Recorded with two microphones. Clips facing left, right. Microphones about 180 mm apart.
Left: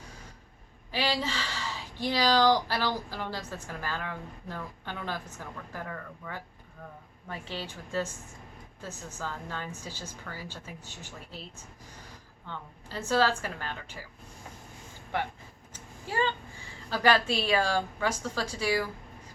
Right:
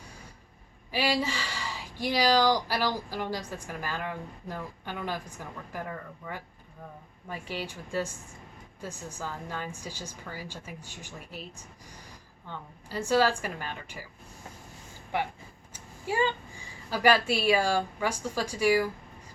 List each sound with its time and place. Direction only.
0.9 s speech: 10° right (ahead or behind)
7.3 s speech: 10° right (ahead or behind)
15.1 s speech: 10° right (ahead or behind)